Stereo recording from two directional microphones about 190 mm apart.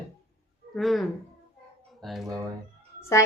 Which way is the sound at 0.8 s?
Centre (ahead or behind).